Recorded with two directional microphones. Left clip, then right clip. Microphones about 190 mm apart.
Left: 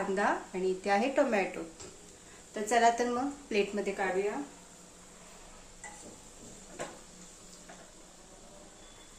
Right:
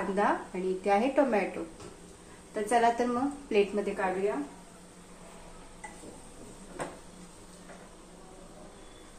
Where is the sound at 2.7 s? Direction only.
25° left (ahead or behind).